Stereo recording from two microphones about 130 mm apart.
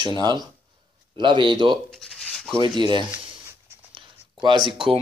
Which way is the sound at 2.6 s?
35° right (ahead or behind).